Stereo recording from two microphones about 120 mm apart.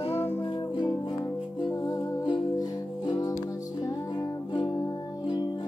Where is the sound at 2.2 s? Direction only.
35° left (ahead or behind).